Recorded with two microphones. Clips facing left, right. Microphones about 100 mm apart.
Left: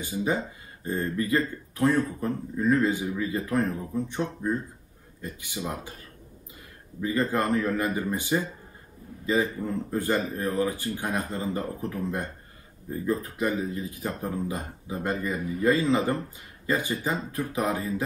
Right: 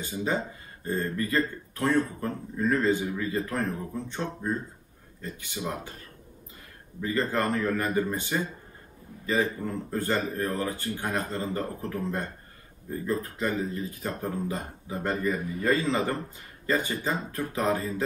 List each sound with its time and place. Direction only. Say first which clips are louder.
0.0 s a man's voice: left 2 dB; 15° left (ahead or behind)
7.0 s a man's voice: left 1 dB; 15° left (ahead or behind)
9.8 s a man's voice: left 1 dB; 15° left (ahead or behind)